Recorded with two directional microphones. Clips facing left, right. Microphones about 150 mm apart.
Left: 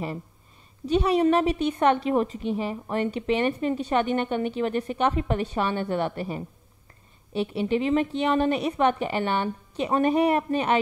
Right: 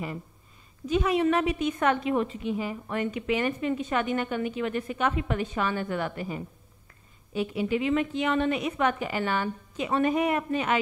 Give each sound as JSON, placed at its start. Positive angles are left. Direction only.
{"t": 0.8, "sound": "a woman's voice", "side_deg": 35}